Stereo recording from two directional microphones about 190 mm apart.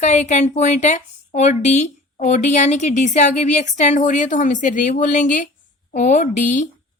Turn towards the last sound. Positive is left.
turn(degrees=40)  # may be behind; listen again after turning